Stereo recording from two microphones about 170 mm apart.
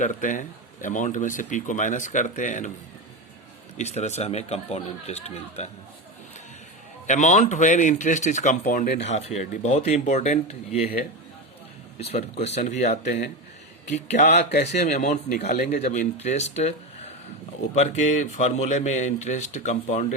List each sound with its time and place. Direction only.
0.0 s speech: 50° left (ahead or behind)
3.8 s speech: 40° left (ahead or behind)
7.1 s speech: 45° left (ahead or behind)
9.0 s speech: 40° left (ahead or behind)
11.9 s speech: 35° left (ahead or behind)
15.4 s speech: 60° left (ahead or behind)
15.8 s speech: 40° left (ahead or behind)